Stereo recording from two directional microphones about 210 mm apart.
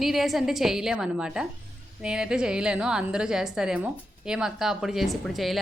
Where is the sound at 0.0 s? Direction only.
Centre (ahead or behind).